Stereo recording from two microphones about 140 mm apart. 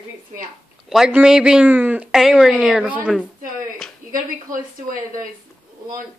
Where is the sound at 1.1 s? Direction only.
5° right (ahead or behind).